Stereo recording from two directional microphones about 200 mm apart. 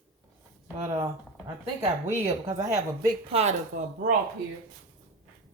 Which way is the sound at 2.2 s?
20° right (ahead or behind).